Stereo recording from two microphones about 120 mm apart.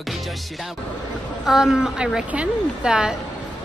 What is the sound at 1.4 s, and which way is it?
A woman's voice, 5° right (ahead or behind).